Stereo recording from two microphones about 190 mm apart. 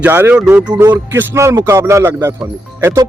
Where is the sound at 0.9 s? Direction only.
10° right (ahead or behind).